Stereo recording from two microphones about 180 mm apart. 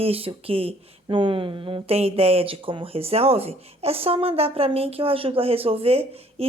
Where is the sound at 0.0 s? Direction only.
30° right (ahead or behind).